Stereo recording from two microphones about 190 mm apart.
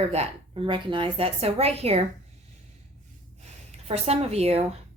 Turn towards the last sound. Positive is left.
turn(degrees=-35)  # may be behind; listen again after turning